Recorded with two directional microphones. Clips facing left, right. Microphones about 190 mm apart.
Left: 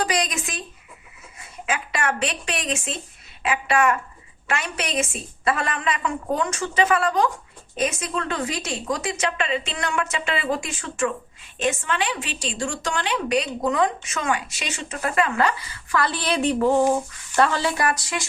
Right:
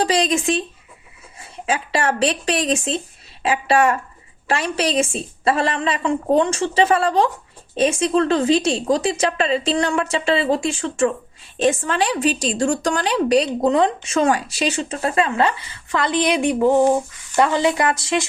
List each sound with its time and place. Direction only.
0.0 s a woman's voice: 30° right (ahead or behind)